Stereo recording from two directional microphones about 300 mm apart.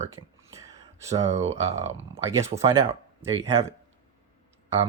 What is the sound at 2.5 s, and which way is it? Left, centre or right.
Speech, centre.